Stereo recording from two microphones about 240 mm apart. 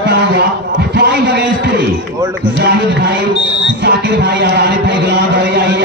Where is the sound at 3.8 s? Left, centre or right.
Right.